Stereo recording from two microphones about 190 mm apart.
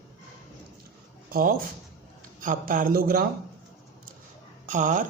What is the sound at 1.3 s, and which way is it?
Speech, 50° right (ahead or behind).